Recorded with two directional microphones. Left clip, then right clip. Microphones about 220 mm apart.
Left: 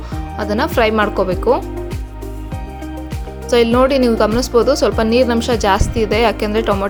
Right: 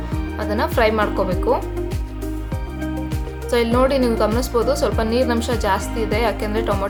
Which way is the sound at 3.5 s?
30° left (ahead or behind).